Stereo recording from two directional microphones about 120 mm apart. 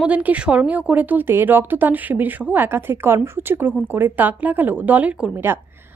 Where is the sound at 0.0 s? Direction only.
10° right (ahead or behind).